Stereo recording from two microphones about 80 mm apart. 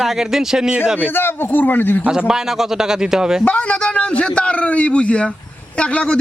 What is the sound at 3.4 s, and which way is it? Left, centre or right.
A man's voice, centre.